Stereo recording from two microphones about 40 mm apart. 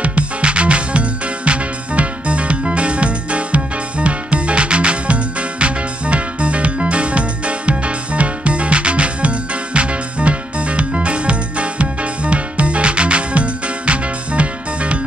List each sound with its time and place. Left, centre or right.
0.0 s music: right